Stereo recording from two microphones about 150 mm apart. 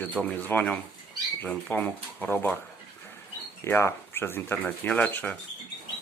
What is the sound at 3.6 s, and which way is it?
Speech, 15° left (ahead or behind).